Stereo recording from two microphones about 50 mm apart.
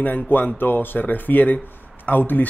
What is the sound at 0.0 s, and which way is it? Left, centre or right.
A man's voice, left.